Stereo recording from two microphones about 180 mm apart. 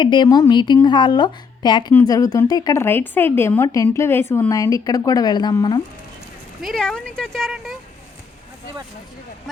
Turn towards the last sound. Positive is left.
turn(degrees=0)  # may be behind; listen again after turning